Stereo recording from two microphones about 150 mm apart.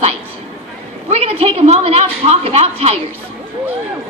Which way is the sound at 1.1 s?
40° right (ahead or behind).